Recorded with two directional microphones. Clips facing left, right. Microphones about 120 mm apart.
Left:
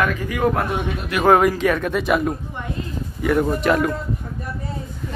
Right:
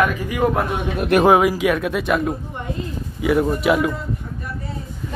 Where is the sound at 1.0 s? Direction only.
50° right (ahead or behind).